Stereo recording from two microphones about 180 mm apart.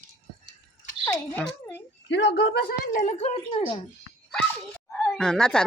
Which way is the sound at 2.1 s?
75° left (ahead or behind).